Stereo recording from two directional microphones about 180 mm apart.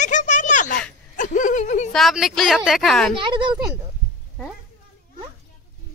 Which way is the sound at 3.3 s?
25° right (ahead or behind).